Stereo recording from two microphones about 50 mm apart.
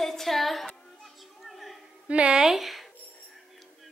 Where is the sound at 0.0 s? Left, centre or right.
Centre.